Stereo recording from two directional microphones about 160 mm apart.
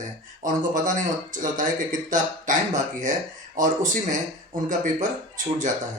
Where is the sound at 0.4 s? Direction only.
55° right (ahead or behind).